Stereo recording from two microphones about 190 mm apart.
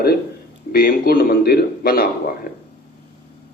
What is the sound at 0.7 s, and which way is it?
A man's voice, 50° left (ahead or behind).